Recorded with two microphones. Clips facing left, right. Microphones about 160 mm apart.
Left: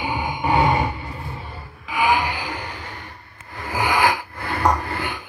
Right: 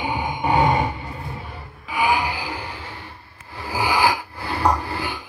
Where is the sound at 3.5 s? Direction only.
30° right (ahead or behind).